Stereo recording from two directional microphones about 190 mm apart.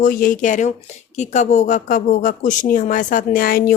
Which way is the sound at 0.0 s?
50° left (ahead or behind).